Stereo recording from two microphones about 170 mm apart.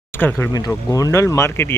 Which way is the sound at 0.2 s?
10° left (ahead or behind).